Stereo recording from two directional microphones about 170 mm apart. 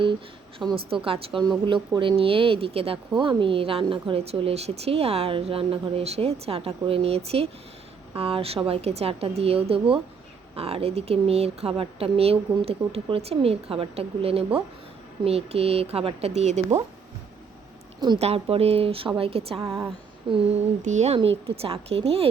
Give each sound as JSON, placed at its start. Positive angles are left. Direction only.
{"t": 0.7, "sound": "speech", "side_deg": -30}
{"t": 18.2, "sound": "speech", "side_deg": -35}
{"t": 19.6, "sound": "a woman's voice", "side_deg": -15}
{"t": 20.3, "sound": "speech", "side_deg": -30}
{"t": 20.8, "sound": "speech", "side_deg": -45}